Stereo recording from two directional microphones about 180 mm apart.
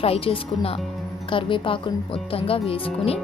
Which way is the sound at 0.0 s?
30° left (ahead or behind).